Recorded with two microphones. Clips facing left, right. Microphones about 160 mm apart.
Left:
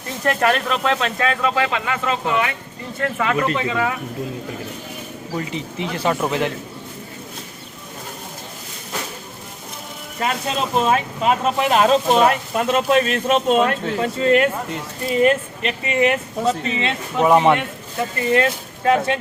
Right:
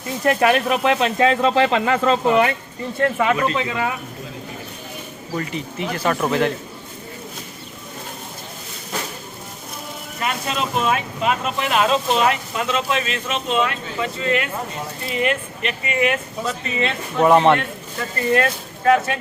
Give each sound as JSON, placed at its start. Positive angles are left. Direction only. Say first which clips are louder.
{"t": 0.3, "sound": "speech", "louder": "right 2 dB", "side_deg": -10}
{"t": 3.0, "sound": "speech", "louder": "right 2 dB", "side_deg": -20}
{"t": 5.4, "sound": "speech", "louder": "even", "side_deg": 20}
{"t": 6.1, "sound": "a man's voice", "louder": "right 2 dB", "side_deg": 10}
{"t": 10.2, "sound": "speech", "louder": "left 2 dB", "side_deg": 35}
{"t": 17.2, "sound": "a man's voice", "louder": "right 1 dB", "side_deg": 10}
{"t": 18.3, "sound": "speech", "louder": "left 1 dB", "side_deg": 20}